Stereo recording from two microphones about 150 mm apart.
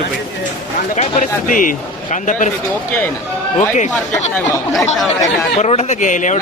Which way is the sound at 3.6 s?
55° left (ahead or behind).